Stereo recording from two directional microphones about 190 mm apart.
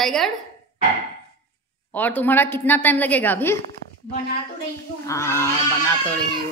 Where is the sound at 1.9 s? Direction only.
10° left (ahead or behind).